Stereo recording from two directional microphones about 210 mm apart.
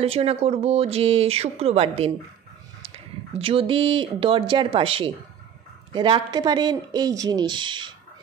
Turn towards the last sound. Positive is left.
turn(degrees=-20)  # may be behind; listen again after turning